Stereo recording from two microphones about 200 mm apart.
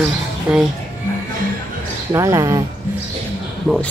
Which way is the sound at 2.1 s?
15° right (ahead or behind).